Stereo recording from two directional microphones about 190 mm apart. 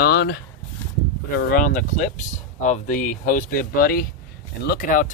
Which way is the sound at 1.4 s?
45° left (ahead or behind).